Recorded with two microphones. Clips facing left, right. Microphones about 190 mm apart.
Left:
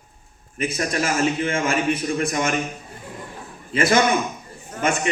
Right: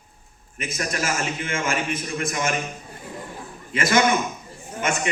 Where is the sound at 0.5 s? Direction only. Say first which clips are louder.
Left 5 dB; 35° left (ahead or behind).